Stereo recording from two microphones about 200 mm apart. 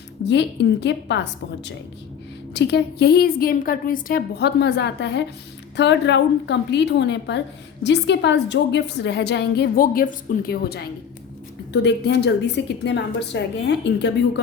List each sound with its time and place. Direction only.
0.3 s a woman's voice: 60° left (ahead or behind)